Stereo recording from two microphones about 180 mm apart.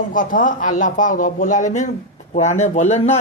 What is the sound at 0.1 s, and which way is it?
A man's voice, 45° left (ahead or behind).